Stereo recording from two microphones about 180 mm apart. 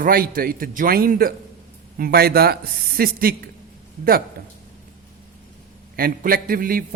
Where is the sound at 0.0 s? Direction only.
55° right (ahead or behind).